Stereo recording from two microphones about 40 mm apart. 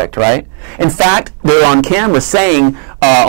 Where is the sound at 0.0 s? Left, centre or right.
Centre.